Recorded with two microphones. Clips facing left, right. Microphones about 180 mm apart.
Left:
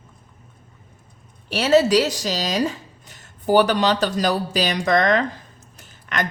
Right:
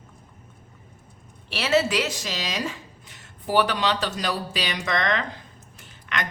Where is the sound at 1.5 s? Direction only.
40° left (ahead or behind).